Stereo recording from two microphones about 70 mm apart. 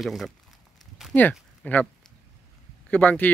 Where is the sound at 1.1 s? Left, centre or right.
Left.